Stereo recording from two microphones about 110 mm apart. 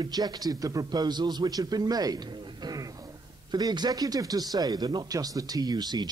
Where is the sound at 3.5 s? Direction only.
40° right (ahead or behind).